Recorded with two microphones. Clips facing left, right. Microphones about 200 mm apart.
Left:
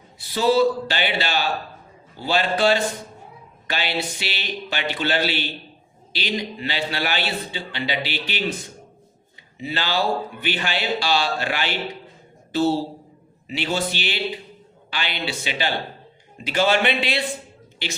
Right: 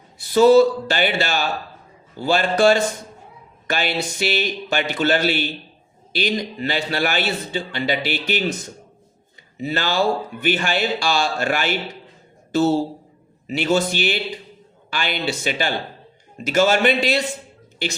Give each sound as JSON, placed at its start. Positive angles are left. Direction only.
{"t": 0.2, "sound": "a man's voice", "side_deg": -45}